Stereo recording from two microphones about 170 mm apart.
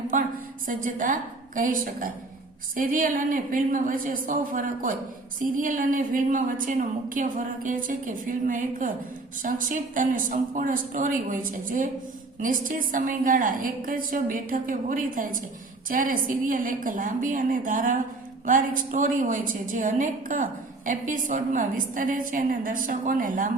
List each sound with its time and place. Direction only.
0.1 s a woman's voice: 50° right (ahead or behind)